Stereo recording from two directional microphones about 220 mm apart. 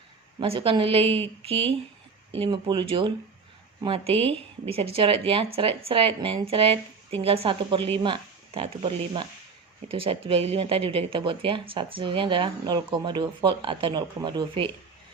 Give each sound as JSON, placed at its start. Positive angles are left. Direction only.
{"t": 0.3, "sound": "speech", "side_deg": -25}